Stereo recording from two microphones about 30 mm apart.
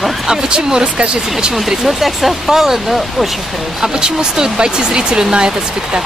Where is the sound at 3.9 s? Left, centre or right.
Right.